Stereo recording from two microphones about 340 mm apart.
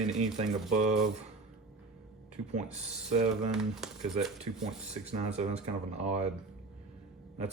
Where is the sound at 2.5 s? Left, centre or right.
Centre.